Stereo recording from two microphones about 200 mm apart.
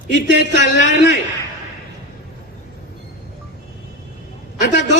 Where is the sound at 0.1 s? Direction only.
60° right (ahead or behind).